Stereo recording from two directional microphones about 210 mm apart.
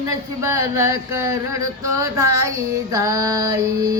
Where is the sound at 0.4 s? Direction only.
15° right (ahead or behind).